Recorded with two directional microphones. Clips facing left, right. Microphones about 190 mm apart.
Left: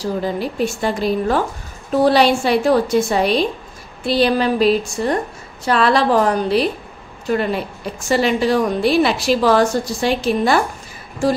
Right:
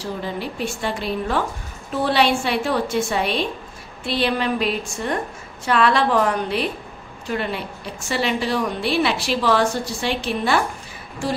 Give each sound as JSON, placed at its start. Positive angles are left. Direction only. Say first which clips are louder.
{"t": 0.0, "sound": "a woman's voice", "louder": "left 6 dB", "side_deg": 40}